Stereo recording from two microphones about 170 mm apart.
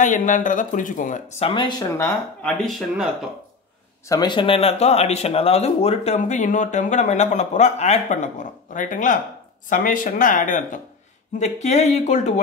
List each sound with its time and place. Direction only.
0.0 s speech: 50° left (ahead or behind)
1.4 s speech: 30° left (ahead or behind); by 2.7 s 10° left (ahead or behind)
2.9 s speech: 5° right (ahead or behind)
4.1 s speech: 25° left (ahead or behind); by 12.4 s 45° left (ahead or behind)